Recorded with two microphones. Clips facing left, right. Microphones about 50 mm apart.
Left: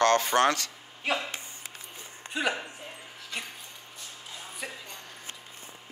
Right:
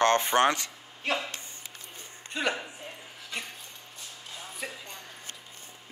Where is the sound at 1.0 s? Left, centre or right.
Centre.